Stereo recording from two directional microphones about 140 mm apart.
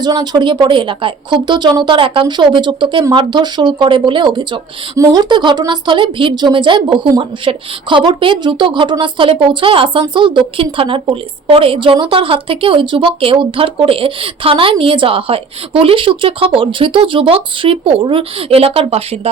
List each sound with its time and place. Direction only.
0.0 s a woman's voice: 30° right (ahead or behind); by 19.3 s 45° right (ahead or behind)